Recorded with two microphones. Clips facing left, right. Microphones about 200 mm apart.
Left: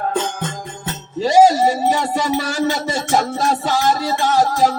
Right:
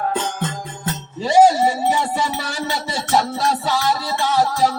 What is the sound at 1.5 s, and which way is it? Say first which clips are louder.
Music: left 1 dB; 40° left (ahead or behind).